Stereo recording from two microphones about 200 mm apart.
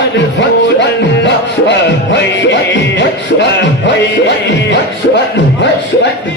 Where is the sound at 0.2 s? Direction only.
60° left (ahead or behind).